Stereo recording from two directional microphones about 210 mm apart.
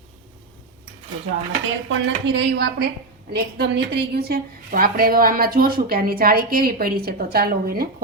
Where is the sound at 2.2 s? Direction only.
55° right (ahead or behind).